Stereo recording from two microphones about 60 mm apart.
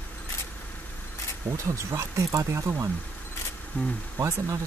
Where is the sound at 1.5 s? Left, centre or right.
Right.